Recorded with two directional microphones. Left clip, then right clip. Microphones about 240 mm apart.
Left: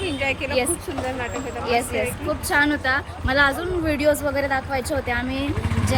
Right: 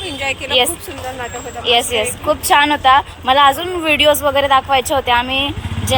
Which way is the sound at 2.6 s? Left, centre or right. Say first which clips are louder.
Right 8 dB; centre.